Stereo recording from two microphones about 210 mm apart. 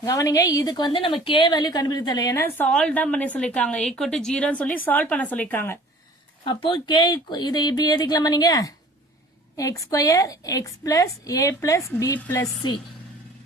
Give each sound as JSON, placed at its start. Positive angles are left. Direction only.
{"t": 0.0, "sound": "a woman's voice", "side_deg": 15}
{"t": 6.4, "sound": "a woman's voice", "side_deg": 25}